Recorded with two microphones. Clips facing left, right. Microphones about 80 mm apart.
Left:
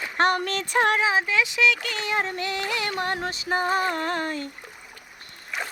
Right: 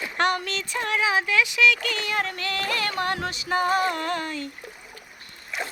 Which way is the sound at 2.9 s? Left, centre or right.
Left.